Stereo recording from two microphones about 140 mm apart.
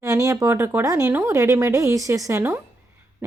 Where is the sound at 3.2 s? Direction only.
15° right (ahead or behind).